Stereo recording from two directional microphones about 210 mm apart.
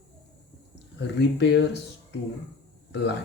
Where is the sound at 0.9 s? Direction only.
55° left (ahead or behind).